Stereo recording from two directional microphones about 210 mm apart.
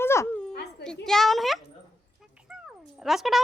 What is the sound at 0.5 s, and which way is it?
Dog, 50° left (ahead or behind).